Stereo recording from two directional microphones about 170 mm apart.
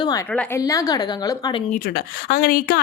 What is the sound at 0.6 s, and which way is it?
A woman's voice, 20° left (ahead or behind).